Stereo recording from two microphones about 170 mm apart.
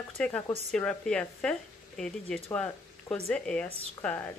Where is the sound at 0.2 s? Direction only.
5° left (ahead or behind).